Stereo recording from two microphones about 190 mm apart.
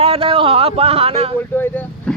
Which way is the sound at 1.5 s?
10° left (ahead or behind).